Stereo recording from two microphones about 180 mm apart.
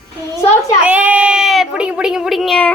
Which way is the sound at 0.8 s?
5° right (ahead or behind).